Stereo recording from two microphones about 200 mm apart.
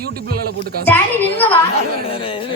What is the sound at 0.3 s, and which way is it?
Speech, 50° right (ahead or behind).